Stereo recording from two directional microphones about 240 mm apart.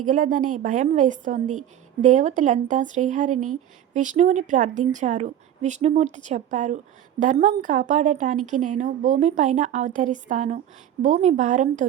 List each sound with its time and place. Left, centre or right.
0.1 s speech: right